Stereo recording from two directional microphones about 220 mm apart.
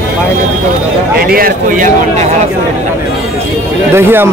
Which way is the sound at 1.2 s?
40° right (ahead or behind).